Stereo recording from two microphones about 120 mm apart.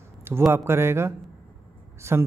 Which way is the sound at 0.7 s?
20° right (ahead or behind).